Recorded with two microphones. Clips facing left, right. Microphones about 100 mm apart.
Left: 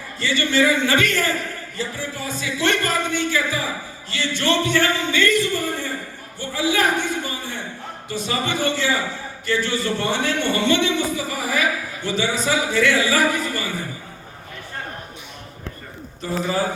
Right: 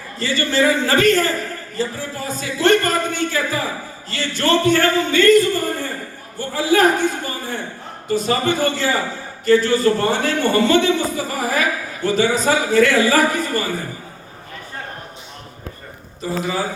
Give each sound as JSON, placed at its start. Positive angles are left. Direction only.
{"t": 0.2, "sound": "a man's voice", "side_deg": -40}